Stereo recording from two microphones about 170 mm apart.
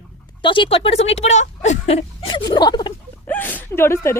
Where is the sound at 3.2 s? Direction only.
10° left (ahead or behind).